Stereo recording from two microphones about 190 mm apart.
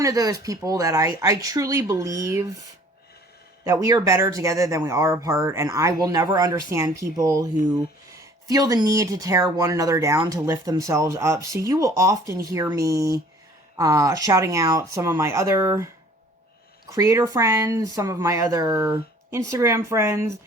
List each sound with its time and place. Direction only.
0.0 s speech: 20° right (ahead or behind)
16.9 s speech: 15° right (ahead or behind)